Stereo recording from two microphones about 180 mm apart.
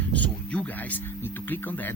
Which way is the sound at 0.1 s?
5° left (ahead or behind).